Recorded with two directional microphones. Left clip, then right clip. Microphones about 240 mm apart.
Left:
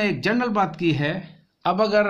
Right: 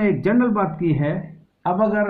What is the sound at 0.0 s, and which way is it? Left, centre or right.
A man's voice, left.